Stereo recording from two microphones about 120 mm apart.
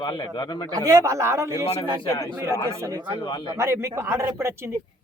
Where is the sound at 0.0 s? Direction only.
40° left (ahead or behind).